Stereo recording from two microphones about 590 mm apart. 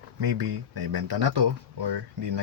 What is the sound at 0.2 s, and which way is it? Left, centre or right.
Speech, right.